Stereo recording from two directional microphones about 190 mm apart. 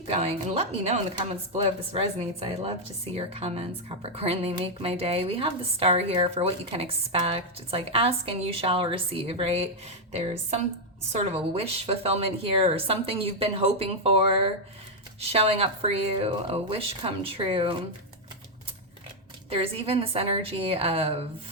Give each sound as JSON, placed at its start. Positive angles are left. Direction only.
{"t": 0.1, "sound": "speech", "side_deg": -30}
{"t": 19.5, "sound": "a woman's voice", "side_deg": -30}